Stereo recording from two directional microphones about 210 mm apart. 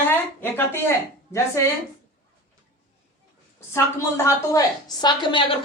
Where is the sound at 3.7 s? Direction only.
15° left (ahead or behind).